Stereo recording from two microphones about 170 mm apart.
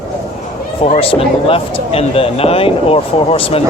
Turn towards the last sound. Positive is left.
turn(degrees=35)  # may be behind; listen again after turning